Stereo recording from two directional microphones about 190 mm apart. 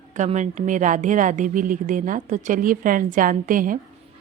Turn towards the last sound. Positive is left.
turn(degrees=-45)  # may be behind; listen again after turning